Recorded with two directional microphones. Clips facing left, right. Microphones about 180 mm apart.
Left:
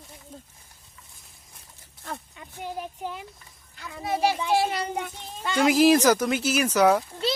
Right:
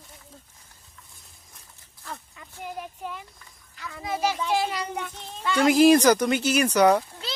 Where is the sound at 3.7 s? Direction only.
25° left (ahead or behind).